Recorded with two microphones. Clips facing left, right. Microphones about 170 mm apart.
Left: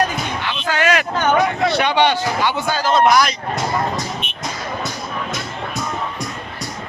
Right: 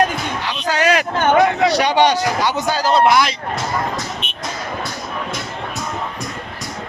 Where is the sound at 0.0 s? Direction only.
40° right (ahead or behind).